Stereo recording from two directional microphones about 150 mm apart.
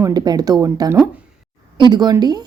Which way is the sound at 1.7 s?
30° right (ahead or behind).